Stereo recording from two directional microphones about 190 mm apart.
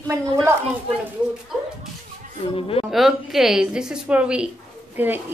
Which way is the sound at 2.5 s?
30° left (ahead or behind).